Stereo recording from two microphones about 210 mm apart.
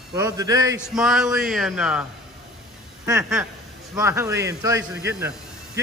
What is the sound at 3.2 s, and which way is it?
A man's voice, 10° right (ahead or behind).